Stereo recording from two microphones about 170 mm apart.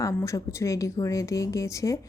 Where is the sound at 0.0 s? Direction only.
15° left (ahead or behind).